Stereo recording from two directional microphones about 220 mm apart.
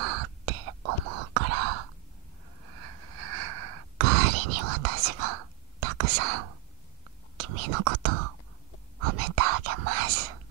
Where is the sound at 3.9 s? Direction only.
90° right.